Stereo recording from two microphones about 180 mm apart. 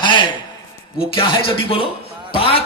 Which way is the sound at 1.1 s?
30° left (ahead or behind).